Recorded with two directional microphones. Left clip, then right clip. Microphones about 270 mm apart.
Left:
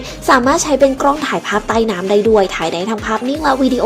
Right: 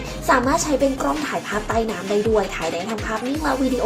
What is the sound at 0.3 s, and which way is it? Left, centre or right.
A woman's voice, left.